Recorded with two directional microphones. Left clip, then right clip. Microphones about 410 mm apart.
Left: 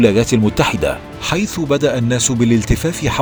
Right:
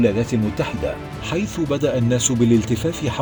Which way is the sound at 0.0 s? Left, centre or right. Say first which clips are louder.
Left 7 dB; centre.